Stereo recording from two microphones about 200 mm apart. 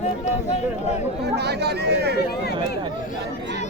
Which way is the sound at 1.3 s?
55° right (ahead or behind).